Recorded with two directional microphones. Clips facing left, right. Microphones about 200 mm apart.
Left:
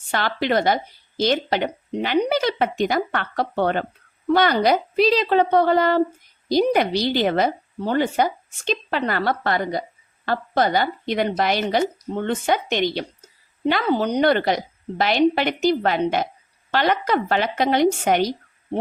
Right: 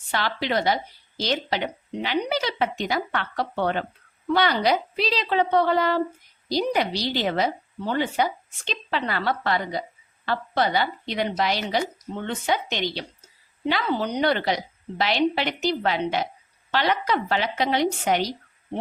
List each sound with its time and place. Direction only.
0.1 s speech: 50° left (ahead or behind)